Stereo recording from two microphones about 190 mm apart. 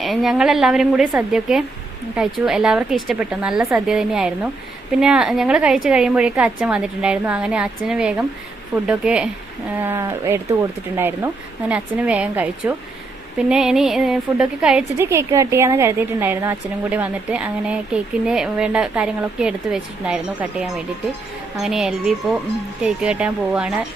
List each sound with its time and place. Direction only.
0.0 s a woman's voice: centre (ahead or behind)